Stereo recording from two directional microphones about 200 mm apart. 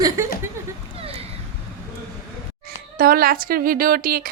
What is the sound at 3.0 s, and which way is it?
A woman's voice, 45° right (ahead or behind).